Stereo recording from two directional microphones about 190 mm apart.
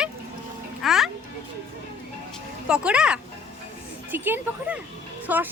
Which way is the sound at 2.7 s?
5° right (ahead or behind).